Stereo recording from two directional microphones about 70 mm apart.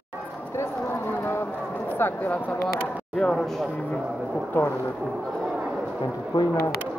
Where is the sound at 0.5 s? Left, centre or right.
Left.